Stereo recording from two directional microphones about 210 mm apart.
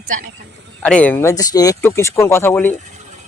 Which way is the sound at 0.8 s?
5° left (ahead or behind).